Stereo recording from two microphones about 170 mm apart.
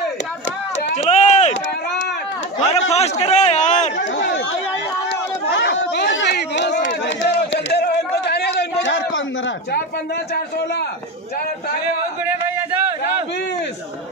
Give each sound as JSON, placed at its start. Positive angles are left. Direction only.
{"t": 0.8, "sound": "run", "side_deg": 40}
{"t": 2.6, "sound": "a man's voice", "side_deg": 40}
{"t": 4.1, "sound": "speech", "side_deg": 75}
{"t": 5.5, "sound": "chatter", "side_deg": 90}
{"t": 10.3, "sound": "a man's voice", "side_deg": 70}